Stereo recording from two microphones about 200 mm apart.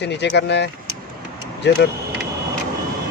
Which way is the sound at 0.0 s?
60° left (ahead or behind).